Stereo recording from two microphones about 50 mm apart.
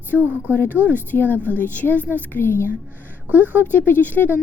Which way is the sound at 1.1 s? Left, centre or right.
Left.